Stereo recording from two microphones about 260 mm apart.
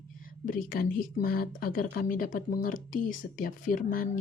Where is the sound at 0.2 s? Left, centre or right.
Left.